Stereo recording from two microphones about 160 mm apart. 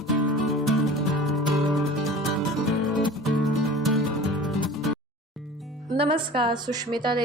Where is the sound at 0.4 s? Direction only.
Centre (ahead or behind).